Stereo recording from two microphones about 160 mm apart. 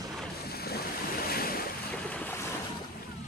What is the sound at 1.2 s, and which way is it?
Waves, 70° left (ahead or behind).